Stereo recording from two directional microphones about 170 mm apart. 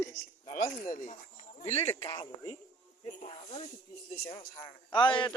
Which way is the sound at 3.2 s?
40° left (ahead or behind).